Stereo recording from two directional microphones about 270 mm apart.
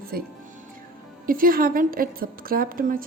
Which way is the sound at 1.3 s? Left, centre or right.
Right.